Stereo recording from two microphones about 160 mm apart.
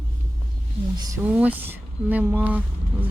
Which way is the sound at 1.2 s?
10° right (ahead or behind).